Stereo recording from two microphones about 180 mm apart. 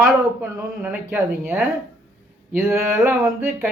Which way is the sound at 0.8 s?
10° right (ahead or behind).